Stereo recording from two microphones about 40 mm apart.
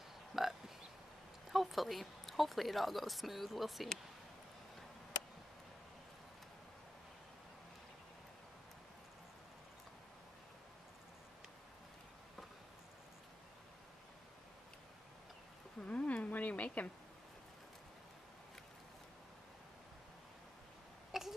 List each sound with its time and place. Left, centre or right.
0.4 s burping: centre
1.5 s speech: centre
15.8 s a sound: left
21.1 s throat clearing: centre